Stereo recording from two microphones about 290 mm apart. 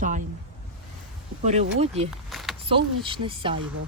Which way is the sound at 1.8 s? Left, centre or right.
Right.